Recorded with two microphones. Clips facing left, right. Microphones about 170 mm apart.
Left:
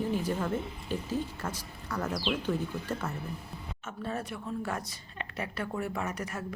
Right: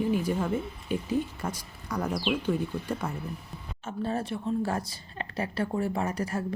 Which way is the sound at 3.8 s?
30° right (ahead or behind).